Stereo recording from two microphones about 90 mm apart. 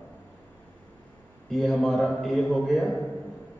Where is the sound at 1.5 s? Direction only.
5° left (ahead or behind).